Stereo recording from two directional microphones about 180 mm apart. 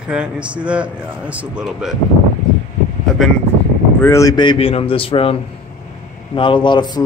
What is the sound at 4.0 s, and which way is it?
A man's voice, 15° left (ahead or behind).